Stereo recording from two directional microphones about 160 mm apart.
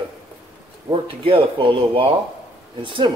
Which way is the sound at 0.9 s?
35° right (ahead or behind).